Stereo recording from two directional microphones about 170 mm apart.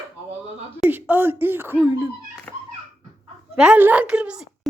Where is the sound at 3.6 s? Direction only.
10° right (ahead or behind).